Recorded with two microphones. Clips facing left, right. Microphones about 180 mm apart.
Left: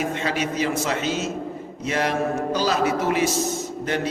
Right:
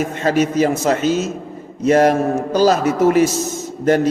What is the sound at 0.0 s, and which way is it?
A man's voice, 45° right (ahead or behind).